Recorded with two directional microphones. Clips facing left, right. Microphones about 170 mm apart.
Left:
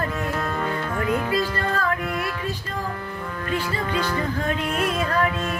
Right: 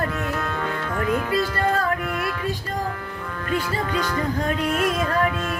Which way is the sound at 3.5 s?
5° left (ahead or behind).